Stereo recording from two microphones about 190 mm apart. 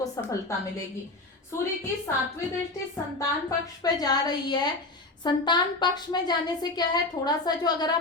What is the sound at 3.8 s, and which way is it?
A woman's voice, 20° left (ahead or behind).